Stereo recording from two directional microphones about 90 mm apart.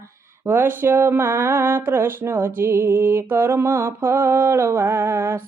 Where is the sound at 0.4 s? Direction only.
25° right (ahead or behind).